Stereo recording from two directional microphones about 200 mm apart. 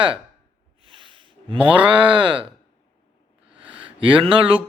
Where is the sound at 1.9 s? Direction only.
25° right (ahead or behind).